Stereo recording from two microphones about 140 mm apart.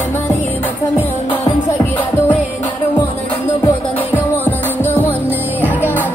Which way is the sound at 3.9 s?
15° left (ahead or behind).